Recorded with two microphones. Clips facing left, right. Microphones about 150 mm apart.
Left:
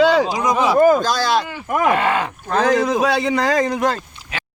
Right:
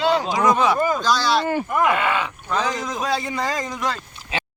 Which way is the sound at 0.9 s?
50° left (ahead or behind).